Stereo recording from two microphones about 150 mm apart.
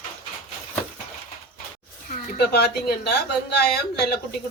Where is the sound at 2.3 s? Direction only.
90° left.